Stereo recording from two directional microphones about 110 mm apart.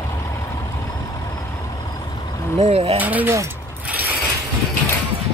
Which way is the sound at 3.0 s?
15° right (ahead or behind).